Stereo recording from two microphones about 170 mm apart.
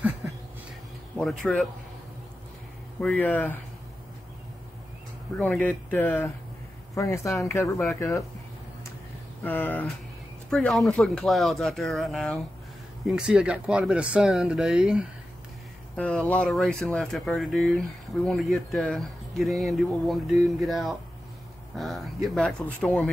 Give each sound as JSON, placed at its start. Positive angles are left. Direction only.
{"t": 1.1, "sound": "speech", "side_deg": 0}
{"t": 3.0, "sound": "speech", "side_deg": 5}
{"t": 5.4, "sound": "speech", "side_deg": 10}
{"t": 9.4, "sound": "speech", "side_deg": 10}